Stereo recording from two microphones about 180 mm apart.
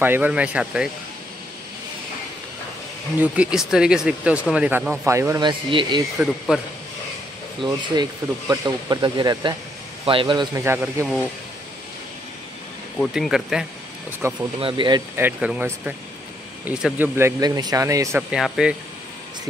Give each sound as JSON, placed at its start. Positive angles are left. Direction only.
{"t": 0.0, "sound": "speech", "side_deg": -10}
{"t": 3.2, "sound": "speech", "side_deg": -5}
{"t": 5.5, "sound": "speech", "side_deg": -25}
{"t": 6.1, "sound": "speech", "side_deg": 0}
{"t": 7.6, "sound": "speech", "side_deg": -25}
{"t": 10.6, "sound": "speech", "side_deg": -15}
{"t": 13.0, "sound": "speech", "side_deg": 0}
{"t": 14.2, "sound": "speech", "side_deg": -15}
{"t": 14.6, "sound": "speech", "side_deg": -30}
{"t": 15.1, "sound": "speech", "side_deg": -10}
{"t": 17.4, "sound": "speech", "side_deg": -20}
{"t": 18.3, "sound": "speech", "side_deg": -5}